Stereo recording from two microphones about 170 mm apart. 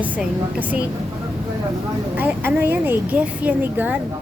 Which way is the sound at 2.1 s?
10° right (ahead or behind).